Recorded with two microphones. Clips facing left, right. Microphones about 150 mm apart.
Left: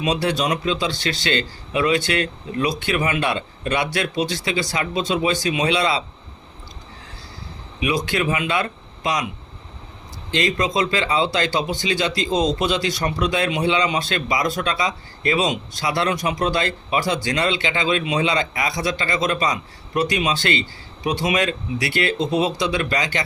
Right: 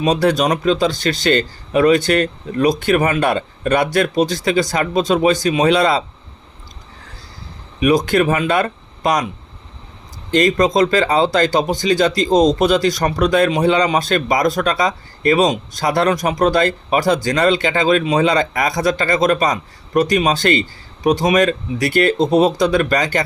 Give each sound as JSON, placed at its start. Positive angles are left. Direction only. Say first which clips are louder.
{"t": 0.0, "sound": "speech", "louder": "right 6 dB", "side_deg": -45}
{"t": 7.8, "sound": "speech", "louder": "right 8 dB", "side_deg": -45}
{"t": 10.3, "sound": "speech", "louder": "right 7 dB", "side_deg": -45}